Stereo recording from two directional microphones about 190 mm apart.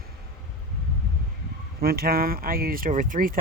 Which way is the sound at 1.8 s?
55° right (ahead or behind).